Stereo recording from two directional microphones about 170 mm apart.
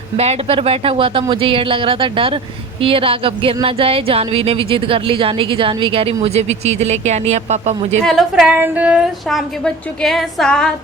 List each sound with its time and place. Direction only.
0.2 s speech: 35° right (ahead or behind)
8.0 s a woman's voice: centre (ahead or behind)